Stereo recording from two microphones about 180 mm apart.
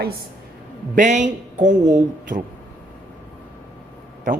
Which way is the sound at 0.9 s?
45° right (ahead or behind).